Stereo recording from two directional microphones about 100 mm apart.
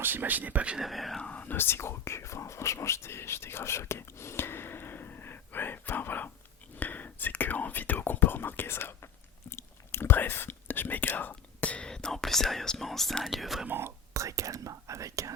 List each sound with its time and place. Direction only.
0.0 s speech: 20° right (ahead or behind)
0.9 s speech: centre (ahead or behind)
1.3 s speech: 15° left (ahead or behind)
9.5 s whispering: 25° left (ahead or behind); by 13.7 s centre (ahead or behind)
13.7 s speech: 25° right (ahead or behind)